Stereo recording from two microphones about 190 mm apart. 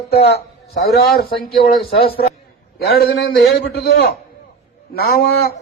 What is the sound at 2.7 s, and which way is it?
Mantra, 55° left (ahead or behind).